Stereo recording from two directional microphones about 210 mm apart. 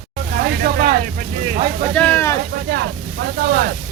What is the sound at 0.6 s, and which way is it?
Speech, 45° right (ahead or behind).